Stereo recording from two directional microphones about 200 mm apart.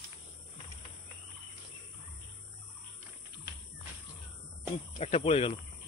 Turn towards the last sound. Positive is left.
turn(degrees=30)  # may be behind; listen again after turning